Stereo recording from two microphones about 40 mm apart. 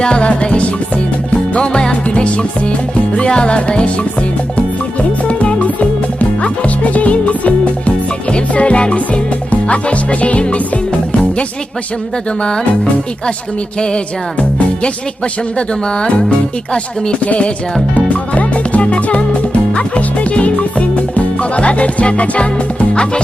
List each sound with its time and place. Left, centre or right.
0.0 s speech: left
1.3 s music: left
3.2 s speech: left
5.3 s music: left
12.4 s speech: centre
15.5 s speech: left
17.2 s music: left